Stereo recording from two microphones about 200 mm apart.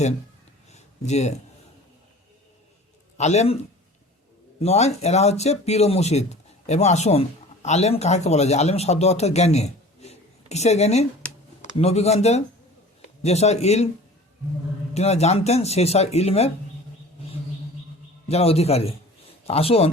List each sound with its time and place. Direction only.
0.7 s a sound: 35° left (ahead or behind)
3.2 s speech: 35° left (ahead or behind)
4.6 s a man's voice: 30° left (ahead or behind)
14.9 s speech: 30° left (ahead or behind)
18.3 s speech: 30° left (ahead or behind)